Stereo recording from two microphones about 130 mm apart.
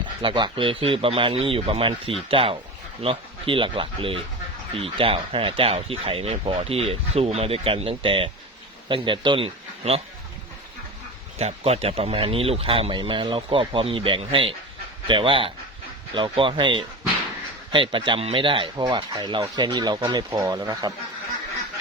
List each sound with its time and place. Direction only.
0.2 s speech: 40° right (ahead or behind)
11.3 s speech: 55° right (ahead or behind); by 20.9 s 30° right (ahead or behind)